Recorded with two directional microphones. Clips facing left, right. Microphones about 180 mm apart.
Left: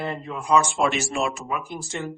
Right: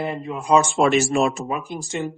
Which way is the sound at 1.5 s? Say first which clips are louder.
Right 3 dB; 25° right (ahead or behind).